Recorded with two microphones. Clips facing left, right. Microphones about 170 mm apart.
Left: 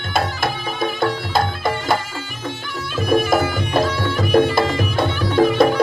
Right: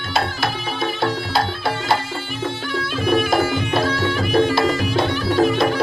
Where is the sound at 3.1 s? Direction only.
50° left (ahead or behind).